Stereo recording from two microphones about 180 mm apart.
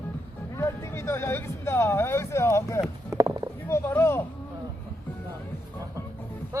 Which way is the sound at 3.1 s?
20° right (ahead or behind).